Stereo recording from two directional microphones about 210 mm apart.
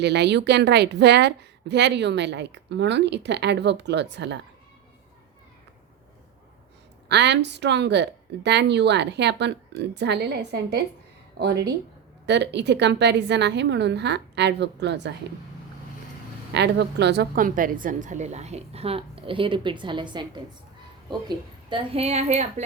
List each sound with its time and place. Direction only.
0.0 s a woman's voice: 55° right (ahead or behind)
7.1 s a woman's voice: 55° right (ahead or behind)
16.6 s a woman's voice: 55° right (ahead or behind); by 22.6 s 30° right (ahead or behind)